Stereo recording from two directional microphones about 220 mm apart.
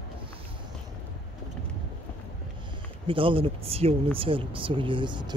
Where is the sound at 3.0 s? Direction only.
25° right (ahead or behind).